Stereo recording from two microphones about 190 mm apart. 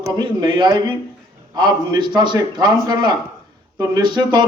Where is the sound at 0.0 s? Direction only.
25° right (ahead or behind).